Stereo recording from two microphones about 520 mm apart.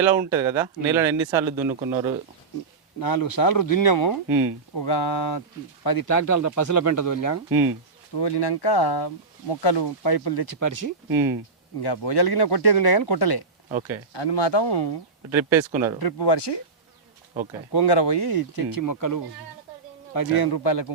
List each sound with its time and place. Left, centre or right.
0.0 s speech: centre
3.0 s speech: left
8.1 s speech: left
11.1 s speech: centre
11.8 s speech: left
13.7 s speech: centre
14.1 s speech: left
15.3 s speech: centre
16.0 s speech: left
17.7 s speech: left